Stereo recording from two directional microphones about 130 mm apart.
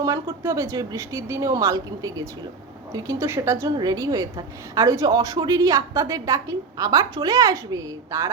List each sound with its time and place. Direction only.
0.0 s a woman's voice: 25° right (ahead or behind)